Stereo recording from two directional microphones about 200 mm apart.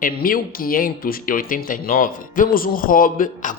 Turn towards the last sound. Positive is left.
turn(degrees=45)  # may be behind; listen again after turning